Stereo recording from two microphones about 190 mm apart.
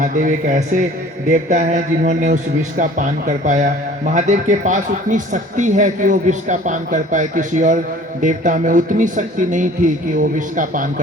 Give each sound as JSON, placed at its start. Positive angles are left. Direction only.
{"t": 0.0, "sound": "a man's voice", "side_deg": -45}